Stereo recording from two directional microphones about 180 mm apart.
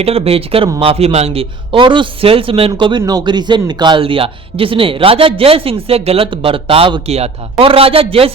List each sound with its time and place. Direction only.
0.0 s a man's voice: 35° right (ahead or behind)